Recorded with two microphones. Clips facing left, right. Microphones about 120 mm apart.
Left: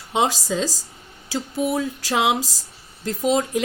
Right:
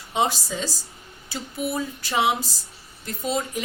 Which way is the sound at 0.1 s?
90° left.